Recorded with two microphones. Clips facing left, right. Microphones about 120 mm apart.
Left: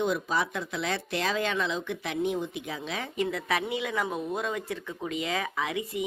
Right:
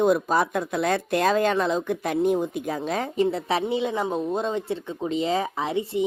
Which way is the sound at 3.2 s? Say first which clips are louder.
Right 5 dB; 30° right (ahead or behind).